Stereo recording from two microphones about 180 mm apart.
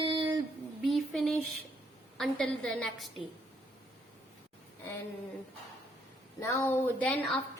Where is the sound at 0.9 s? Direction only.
Centre (ahead or behind).